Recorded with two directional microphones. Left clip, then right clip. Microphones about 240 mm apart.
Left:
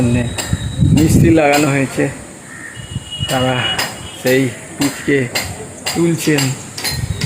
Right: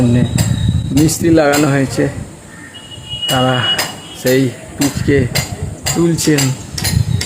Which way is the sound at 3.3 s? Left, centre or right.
Centre.